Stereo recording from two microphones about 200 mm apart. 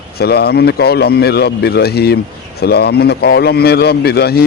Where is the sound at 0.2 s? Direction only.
50° left (ahead or behind).